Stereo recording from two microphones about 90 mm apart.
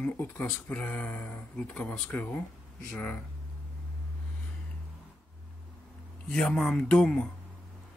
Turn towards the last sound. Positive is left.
turn(degrees=10)  # may be behind; listen again after turning